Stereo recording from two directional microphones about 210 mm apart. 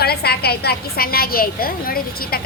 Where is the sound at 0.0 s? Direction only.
50° left (ahead or behind).